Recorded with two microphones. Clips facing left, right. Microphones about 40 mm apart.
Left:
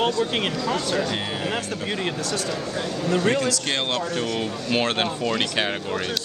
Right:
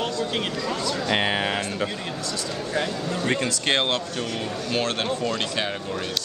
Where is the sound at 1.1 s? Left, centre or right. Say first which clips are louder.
Right 4 dB; right.